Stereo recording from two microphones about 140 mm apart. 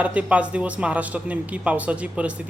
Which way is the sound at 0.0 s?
10° right (ahead or behind).